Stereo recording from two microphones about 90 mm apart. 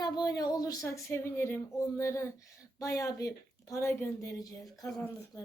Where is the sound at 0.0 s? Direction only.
50° left (ahead or behind).